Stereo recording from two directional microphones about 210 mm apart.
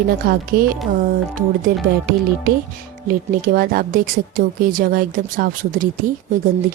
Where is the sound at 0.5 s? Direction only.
40° right (ahead or behind).